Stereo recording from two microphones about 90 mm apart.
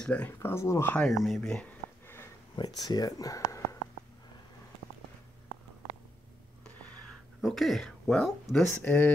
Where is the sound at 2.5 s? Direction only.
50° left (ahead or behind).